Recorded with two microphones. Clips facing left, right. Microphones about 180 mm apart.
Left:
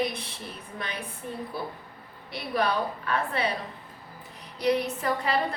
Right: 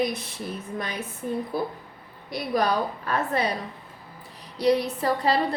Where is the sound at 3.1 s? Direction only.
40° right (ahead or behind).